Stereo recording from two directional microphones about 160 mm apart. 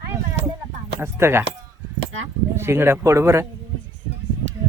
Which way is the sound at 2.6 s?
15° right (ahead or behind).